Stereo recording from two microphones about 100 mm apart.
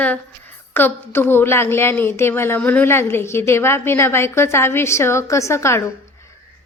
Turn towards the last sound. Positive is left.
turn(degrees=30)  # may be behind; listen again after turning